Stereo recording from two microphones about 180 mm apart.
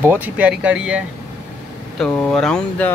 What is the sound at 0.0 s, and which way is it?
Speech, 10° right (ahead or behind).